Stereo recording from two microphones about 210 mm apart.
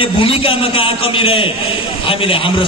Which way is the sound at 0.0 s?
25° left (ahead or behind).